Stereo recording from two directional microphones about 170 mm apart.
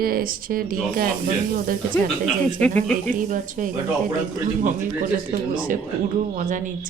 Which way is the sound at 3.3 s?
50° right (ahead or behind).